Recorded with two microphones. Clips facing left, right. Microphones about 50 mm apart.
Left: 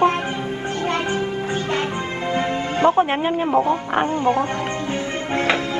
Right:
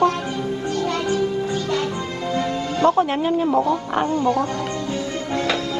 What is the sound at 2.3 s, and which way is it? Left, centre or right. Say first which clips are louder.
A man's voice: left 1 dB; left.